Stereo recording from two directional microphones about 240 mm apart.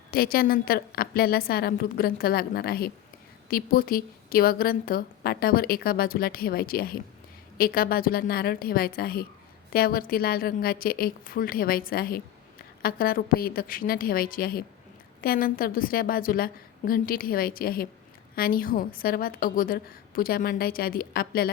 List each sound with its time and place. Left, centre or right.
0.1 s a woman's voice: left